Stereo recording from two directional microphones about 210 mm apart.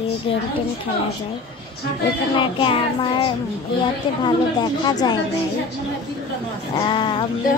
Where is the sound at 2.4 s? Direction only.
25° left (ahead or behind).